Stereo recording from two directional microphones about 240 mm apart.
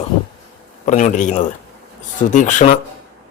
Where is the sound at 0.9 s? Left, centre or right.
Left.